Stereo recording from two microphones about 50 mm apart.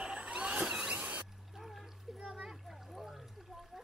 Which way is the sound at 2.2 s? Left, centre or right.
Centre.